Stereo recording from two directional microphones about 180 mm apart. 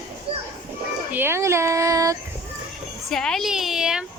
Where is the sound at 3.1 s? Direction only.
Centre (ahead or behind).